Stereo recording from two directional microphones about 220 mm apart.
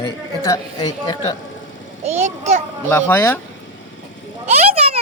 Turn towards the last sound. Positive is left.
turn(degrees=-30)  # may be behind; listen again after turning